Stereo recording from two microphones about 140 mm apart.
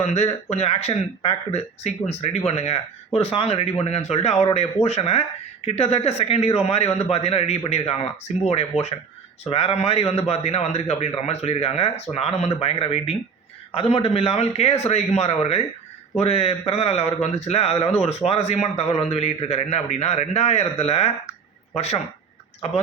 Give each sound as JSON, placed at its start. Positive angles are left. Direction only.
{"t": 0.0, "sound": "a man's voice", "side_deg": 55}